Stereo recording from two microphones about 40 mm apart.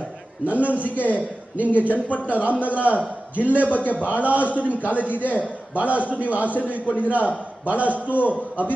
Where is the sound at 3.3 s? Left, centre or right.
Right.